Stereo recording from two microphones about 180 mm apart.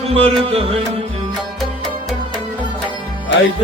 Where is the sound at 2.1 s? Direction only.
5° left (ahead or behind).